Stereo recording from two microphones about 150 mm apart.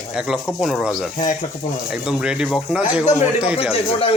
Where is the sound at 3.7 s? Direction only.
40° left (ahead or behind).